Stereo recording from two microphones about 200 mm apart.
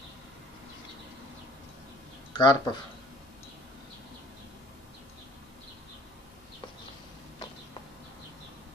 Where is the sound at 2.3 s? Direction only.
20° left (ahead or behind).